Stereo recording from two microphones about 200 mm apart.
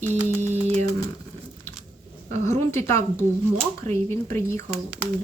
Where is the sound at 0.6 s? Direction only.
30° right (ahead or behind).